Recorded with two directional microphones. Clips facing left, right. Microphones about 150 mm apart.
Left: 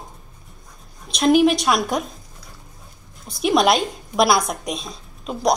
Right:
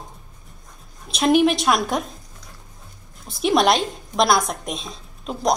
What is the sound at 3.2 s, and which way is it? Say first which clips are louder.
A woman's voice: left 1 dB; centre (ahead or behind).